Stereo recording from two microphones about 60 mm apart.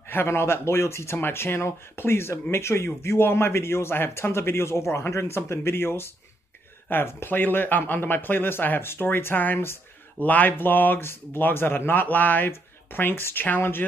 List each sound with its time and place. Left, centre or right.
0.1 s a man's voice: left